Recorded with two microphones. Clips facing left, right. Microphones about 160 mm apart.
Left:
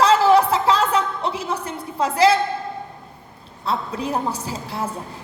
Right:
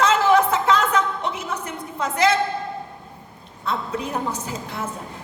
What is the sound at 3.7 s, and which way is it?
A woman's voice, 30° left (ahead or behind).